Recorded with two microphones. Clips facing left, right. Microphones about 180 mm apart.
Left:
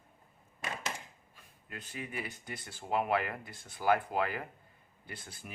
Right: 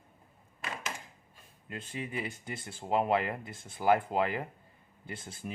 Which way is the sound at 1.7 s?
25° right (ahead or behind).